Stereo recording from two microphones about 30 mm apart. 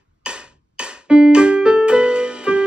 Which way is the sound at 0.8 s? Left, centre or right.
Right.